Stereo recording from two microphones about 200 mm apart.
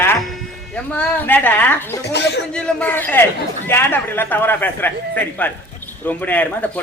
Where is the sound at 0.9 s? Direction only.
10° left (ahead or behind).